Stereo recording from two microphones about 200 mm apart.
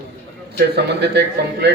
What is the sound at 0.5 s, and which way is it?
A man's voice, 55° right (ahead or behind).